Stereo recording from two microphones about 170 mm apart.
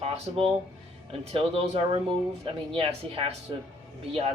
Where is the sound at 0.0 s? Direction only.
35° right (ahead or behind).